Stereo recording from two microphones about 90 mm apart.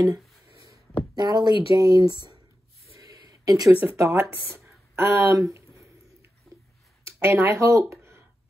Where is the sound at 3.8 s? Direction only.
30° right (ahead or behind).